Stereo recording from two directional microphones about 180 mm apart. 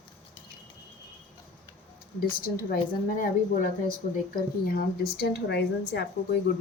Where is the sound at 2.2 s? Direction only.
55° left (ahead or behind); by 6.1 s 70° left (ahead or behind).